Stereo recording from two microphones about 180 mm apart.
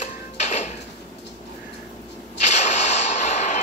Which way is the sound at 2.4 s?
40° left (ahead or behind).